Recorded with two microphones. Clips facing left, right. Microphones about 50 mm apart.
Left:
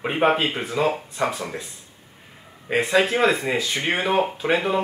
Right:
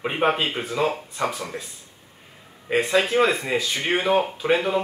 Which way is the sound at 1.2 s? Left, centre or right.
Left.